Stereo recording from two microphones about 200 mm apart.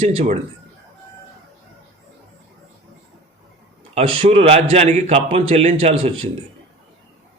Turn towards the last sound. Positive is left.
turn(degrees=-25)  # may be behind; listen again after turning